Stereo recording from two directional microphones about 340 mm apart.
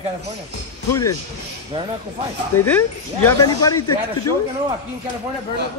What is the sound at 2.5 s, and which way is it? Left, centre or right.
Speech, left.